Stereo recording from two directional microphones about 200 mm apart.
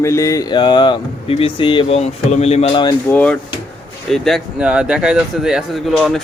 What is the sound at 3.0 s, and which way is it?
Speech, 5° left (ahead or behind).